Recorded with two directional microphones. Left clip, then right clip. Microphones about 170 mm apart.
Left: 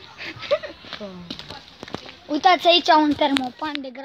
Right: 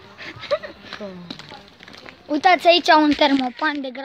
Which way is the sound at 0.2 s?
20° left (ahead or behind).